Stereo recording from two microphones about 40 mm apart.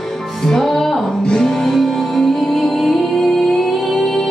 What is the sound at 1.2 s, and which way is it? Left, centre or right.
Music, centre.